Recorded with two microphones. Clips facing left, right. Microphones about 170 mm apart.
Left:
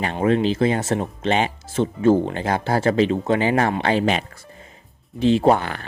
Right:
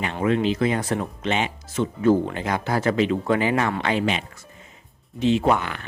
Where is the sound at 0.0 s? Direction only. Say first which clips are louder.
Left 3 dB; 30° left (ahead or behind).